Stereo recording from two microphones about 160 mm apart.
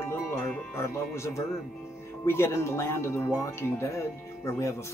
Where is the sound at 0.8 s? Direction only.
15° left (ahead or behind).